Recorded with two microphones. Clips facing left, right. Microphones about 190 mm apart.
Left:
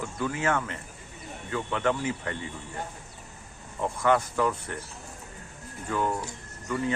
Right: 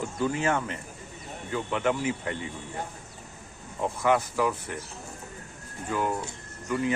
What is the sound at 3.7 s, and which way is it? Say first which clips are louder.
Speech: even; 10° right (ahead or behind).